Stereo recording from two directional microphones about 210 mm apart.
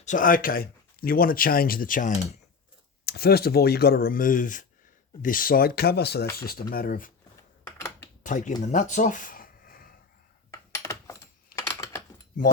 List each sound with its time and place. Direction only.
0.0 s speech: 40° left (ahead or behind)
3.1 s speech: 50° left (ahead or behind)
7.6 s a sound: 10° left (ahead or behind)
8.2 s speech: 35° left (ahead or behind)
10.5 s a sound: 15° left (ahead or behind)
11.5 s typing: 15° left (ahead or behind)